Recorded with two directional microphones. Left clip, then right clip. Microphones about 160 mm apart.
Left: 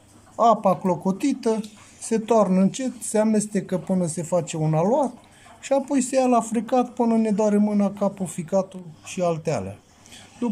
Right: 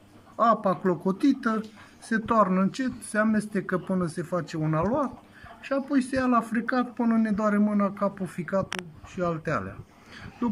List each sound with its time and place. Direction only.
0.4 s speech: 15° left (ahead or behind)